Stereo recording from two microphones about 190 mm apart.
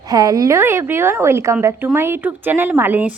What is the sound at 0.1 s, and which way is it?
A woman's voice, 20° right (ahead or behind).